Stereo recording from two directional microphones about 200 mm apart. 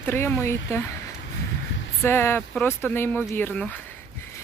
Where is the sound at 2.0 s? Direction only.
10° left (ahead or behind).